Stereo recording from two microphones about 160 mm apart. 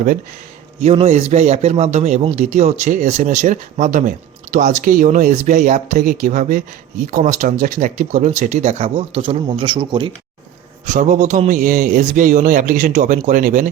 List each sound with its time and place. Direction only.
0.8 s a man's voice: 40° right (ahead or behind)
10.8 s a man's voice: 50° right (ahead or behind)